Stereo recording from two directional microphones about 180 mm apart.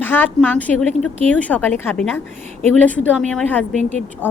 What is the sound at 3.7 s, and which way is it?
Speech, 40° right (ahead or behind).